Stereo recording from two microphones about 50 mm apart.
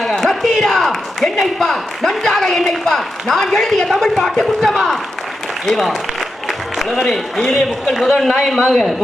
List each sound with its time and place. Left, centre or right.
0.0 s a man's voice: centre
4.7 s a man's voice: centre
7.5 s a man's voice: centre